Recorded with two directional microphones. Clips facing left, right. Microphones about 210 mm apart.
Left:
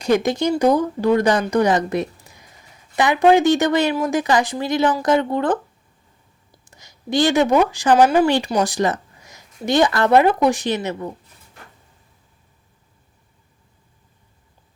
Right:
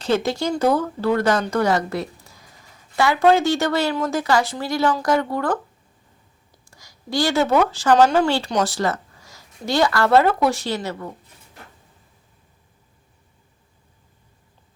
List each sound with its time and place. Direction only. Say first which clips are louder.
0.0 s a woman's voice: left 3 dB; 15° left (ahead or behind)